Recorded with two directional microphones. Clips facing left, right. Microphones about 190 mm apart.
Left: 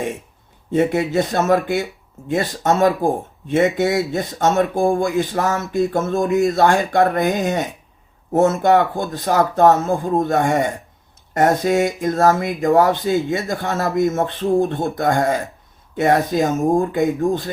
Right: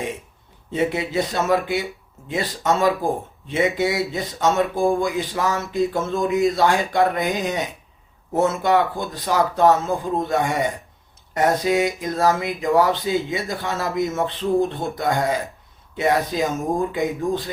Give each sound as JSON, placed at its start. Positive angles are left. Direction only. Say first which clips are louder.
{"t": 0.7, "sound": "speech", "louder": "left 5 dB", "side_deg": 50}